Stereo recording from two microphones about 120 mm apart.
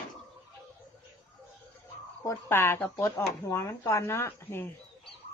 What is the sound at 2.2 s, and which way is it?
Speech, 20° left (ahead or behind).